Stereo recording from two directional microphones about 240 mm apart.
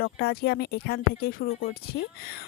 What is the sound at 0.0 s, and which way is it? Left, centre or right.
A woman's voice, left.